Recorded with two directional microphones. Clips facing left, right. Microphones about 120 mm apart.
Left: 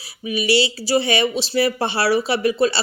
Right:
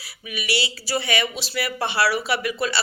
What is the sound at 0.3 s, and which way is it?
Speech, 30° left (ahead or behind).